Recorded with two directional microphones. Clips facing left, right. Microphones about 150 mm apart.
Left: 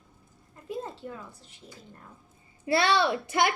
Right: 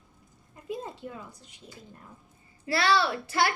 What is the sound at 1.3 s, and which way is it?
Speech, 15° right (ahead or behind).